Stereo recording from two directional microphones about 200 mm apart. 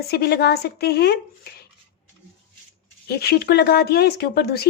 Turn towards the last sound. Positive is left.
turn(degrees=50)  # may be behind; listen again after turning